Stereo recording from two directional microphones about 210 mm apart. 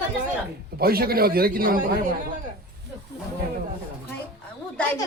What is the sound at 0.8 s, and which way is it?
A man's voice, 45° right (ahead or behind).